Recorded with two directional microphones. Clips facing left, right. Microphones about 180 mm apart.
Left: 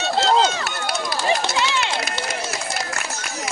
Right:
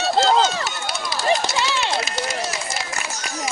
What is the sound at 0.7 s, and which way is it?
Run, 60° left (ahead or behind).